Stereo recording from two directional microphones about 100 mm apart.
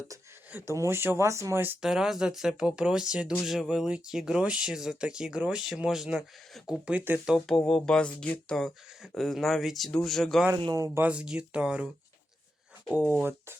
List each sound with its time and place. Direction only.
0.7 s speech: 25° right (ahead or behind)
1.8 s speech: 5° right (ahead or behind)
6.8 s speech: 15° right (ahead or behind)
7.3 s speech: centre (ahead or behind)
10.8 s speech: 30° right (ahead or behind)
11.0 s speech: 10° right (ahead or behind)
12.9 s speech: 15° right (ahead or behind)